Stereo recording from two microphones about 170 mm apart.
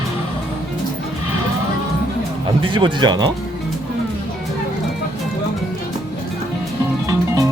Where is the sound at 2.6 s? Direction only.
30° right (ahead or behind).